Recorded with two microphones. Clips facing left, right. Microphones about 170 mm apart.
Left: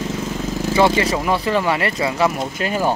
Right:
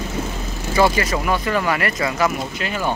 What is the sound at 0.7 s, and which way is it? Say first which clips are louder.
Speech: left 1 dB; 25° left (ahead or behind).